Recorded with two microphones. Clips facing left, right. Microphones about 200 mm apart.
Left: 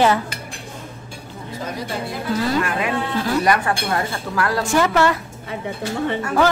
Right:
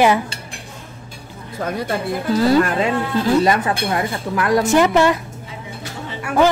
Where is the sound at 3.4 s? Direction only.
20° right (ahead or behind).